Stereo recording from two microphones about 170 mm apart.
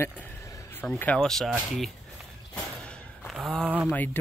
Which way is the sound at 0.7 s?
10° left (ahead or behind).